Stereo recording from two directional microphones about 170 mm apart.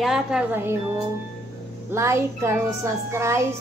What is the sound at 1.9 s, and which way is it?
Speech, 15° right (ahead or behind).